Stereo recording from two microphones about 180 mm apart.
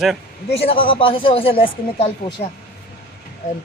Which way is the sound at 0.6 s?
30° left (ahead or behind).